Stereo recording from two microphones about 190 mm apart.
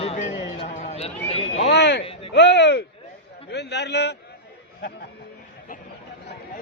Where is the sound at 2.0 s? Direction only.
30° left (ahead or behind).